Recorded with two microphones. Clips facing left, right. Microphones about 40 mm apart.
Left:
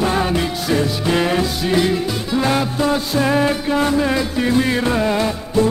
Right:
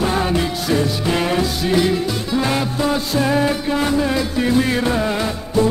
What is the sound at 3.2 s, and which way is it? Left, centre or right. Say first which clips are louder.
Music: left 1 dB; left.